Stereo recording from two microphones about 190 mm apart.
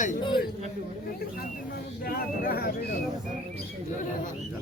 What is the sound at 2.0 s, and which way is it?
Speech, 50° left (ahead or behind).